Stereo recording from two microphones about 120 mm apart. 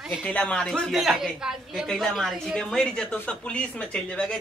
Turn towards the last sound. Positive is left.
turn(degrees=10)  # may be behind; listen again after turning